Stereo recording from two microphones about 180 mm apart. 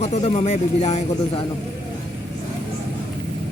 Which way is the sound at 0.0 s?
40° left (ahead or behind).